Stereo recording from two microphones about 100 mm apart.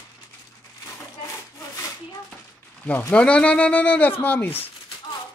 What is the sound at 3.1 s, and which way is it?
Speech, 10° left (ahead or behind).